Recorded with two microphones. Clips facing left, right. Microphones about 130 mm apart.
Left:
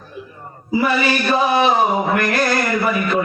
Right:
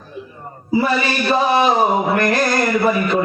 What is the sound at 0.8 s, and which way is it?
Speech, 35° right (ahead or behind).